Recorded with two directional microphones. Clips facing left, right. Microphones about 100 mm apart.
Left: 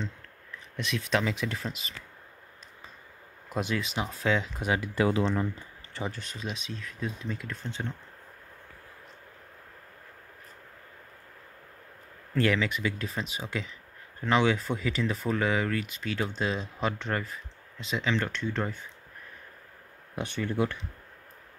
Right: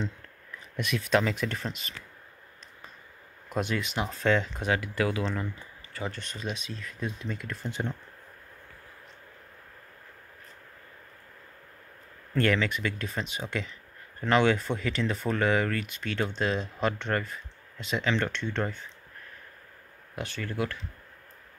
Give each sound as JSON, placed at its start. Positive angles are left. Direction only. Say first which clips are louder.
{"t": 0.7, "sound": "speech", "louder": "right 3 dB", "side_deg": 0}
{"t": 3.4, "sound": "speech", "louder": "right 1 dB", "side_deg": 0}
{"t": 4.7, "sound": "speech", "louder": "left 4 dB", "side_deg": 20}
{"t": 6.1, "sound": "speech", "louder": "right 2 dB", "side_deg": 0}
{"t": 12.4, "sound": "speech", "louder": "even", "side_deg": 5}
{"t": 20.2, "sound": "speech", "louder": "left 3 dB", "side_deg": 20}